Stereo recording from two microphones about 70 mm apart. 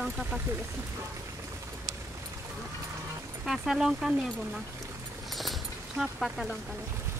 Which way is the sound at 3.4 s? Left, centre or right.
Centre.